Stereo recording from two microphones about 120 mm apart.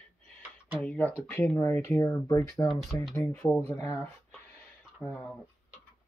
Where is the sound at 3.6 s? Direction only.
20° left (ahead or behind).